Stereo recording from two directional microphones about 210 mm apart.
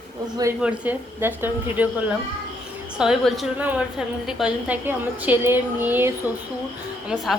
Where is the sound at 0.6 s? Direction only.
5° right (ahead or behind).